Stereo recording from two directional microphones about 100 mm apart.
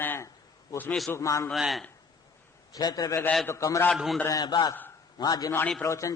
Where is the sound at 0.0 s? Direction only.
20° left (ahead or behind).